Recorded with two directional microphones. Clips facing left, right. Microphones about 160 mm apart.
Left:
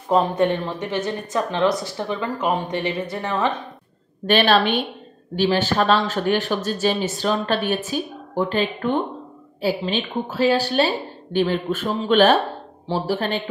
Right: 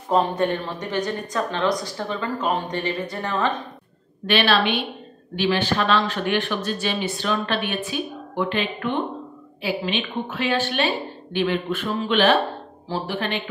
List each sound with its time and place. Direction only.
0.4 s speech: 20° left (ahead or behind)
4.3 s a woman's voice: 45° left (ahead or behind)